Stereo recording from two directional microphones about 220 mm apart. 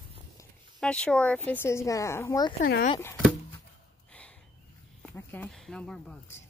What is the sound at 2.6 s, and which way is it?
Speech, 40° left (ahead or behind).